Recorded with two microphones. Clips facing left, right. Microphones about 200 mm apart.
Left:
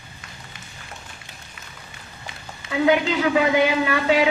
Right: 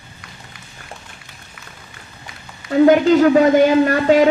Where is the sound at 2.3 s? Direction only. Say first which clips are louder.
Left 1 dB; 25° left (ahead or behind).